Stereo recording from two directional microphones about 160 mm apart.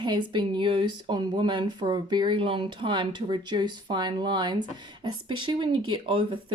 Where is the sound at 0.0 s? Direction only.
30° right (ahead or behind).